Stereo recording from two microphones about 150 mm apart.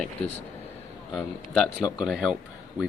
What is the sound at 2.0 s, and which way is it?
Speech, 5° right (ahead or behind).